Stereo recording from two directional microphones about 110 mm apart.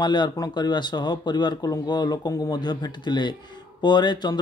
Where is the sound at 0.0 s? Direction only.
45° left (ahead or behind).